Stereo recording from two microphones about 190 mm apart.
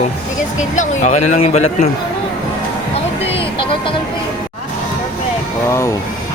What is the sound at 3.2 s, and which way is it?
Music, 30° left (ahead or behind).